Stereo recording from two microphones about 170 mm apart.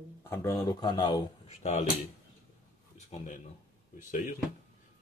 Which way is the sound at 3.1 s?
45° left (ahead or behind).